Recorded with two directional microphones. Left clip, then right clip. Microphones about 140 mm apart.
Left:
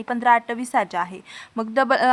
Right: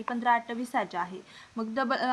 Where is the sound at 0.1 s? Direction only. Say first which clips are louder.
Left 8 dB; 35° left (ahead or behind).